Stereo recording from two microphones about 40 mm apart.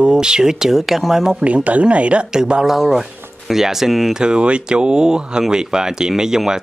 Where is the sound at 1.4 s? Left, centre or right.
Right.